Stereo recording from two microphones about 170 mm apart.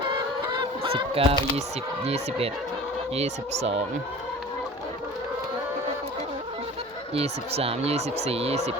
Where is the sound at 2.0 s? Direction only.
35° right (ahead or behind).